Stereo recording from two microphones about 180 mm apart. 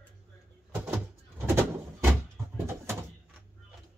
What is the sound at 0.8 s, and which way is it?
Vehicle, 10° right (ahead or behind).